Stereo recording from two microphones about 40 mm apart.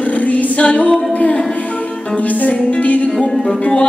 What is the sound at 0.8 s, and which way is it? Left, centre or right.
A capella, left.